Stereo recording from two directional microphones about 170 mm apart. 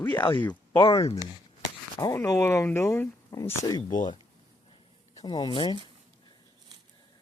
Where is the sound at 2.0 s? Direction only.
20° left (ahead or behind).